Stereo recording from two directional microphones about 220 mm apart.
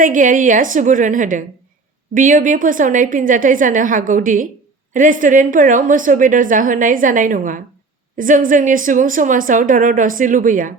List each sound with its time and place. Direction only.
0.0 s speech: 35° right (ahead or behind)